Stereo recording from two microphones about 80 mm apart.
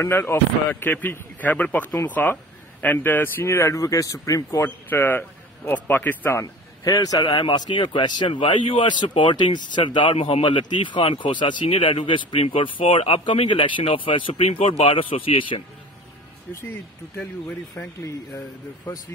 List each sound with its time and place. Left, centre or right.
0.0 s a man's voice: left
4.6 s a man's voice: left
6.4 s a man's voice: left
7.4 s a man's voice: left
17.8 s a man's voice: left